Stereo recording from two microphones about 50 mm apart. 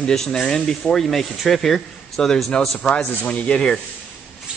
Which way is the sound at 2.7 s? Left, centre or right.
Left.